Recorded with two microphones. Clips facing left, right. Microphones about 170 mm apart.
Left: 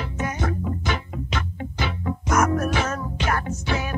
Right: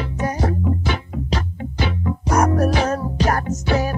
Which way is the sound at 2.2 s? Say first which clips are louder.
Right 4 dB; 35° right (ahead or behind).